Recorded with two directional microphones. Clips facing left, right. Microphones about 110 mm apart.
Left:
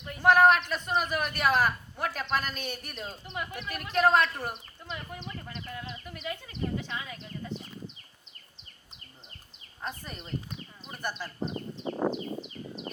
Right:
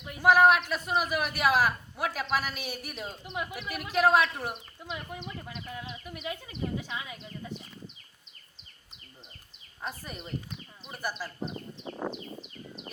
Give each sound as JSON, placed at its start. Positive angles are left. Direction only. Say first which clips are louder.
{"t": 0.0, "sound": "a man's voice", "louder": "even", "side_deg": -5}
{"t": 9.8, "sound": "a man's voice", "louder": "even", "side_deg": -5}
{"t": 11.9, "sound": "a sound", "louder": "left 6 dB", "side_deg": 45}